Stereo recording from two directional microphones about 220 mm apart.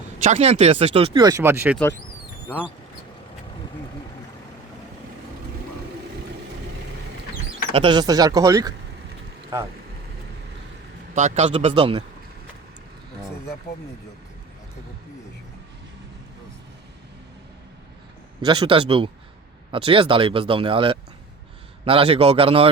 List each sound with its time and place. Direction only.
0.2 s speech: 30° right (ahead or behind); by 1.8 s 10° right (ahead or behind)
7.7 s speech: 25° right (ahead or behind)
11.1 s speech: 30° right (ahead or behind)
18.4 s speech: 20° right (ahead or behind)